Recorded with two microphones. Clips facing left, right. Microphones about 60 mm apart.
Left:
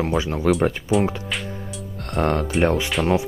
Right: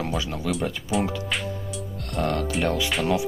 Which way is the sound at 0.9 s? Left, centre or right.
Centre.